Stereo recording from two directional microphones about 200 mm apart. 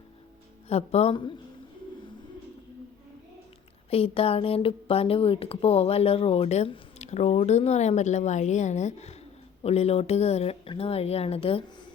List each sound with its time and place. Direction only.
0.7 s speech: 30° left (ahead or behind)
3.8 s speech: 30° left (ahead or behind)